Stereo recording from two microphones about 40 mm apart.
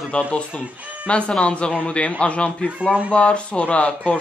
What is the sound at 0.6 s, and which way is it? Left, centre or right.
Speech, right.